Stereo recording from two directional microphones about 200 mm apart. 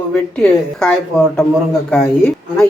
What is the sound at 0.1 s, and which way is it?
Speech, 5° left (ahead or behind).